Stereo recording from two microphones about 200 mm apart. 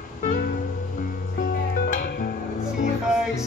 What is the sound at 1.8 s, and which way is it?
Music, 45° left (ahead or behind).